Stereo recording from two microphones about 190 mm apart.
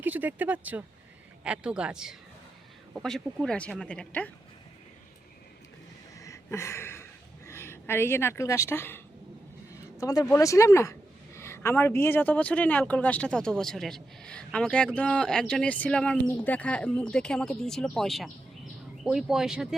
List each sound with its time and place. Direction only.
0.0 s speech: 10° right (ahead or behind)
6.1 s a sound: 15° left (ahead or behind)
9.7 s speech: 15° left (ahead or behind); by 19.6 s 5° right (ahead or behind)